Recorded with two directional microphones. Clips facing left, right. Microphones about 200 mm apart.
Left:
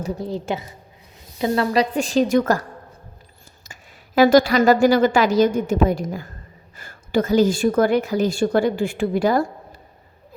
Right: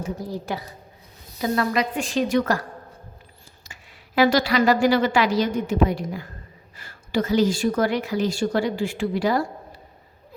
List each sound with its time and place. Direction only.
0.2 s a woman's voice: 25° left (ahead or behind); by 2.6 s 40° left (ahead or behind)
3.7 s a woman's voice: 45° left (ahead or behind)